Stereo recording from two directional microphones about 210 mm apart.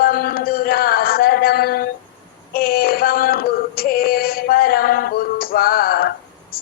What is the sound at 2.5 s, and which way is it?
Female singing, 45° left (ahead or behind).